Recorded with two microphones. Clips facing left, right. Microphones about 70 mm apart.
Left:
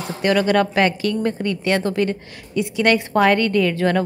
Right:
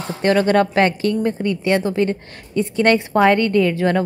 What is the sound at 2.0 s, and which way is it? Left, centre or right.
Speech, right.